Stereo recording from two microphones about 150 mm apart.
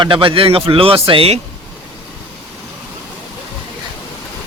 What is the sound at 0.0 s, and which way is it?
Speech, 35° right (ahead or behind).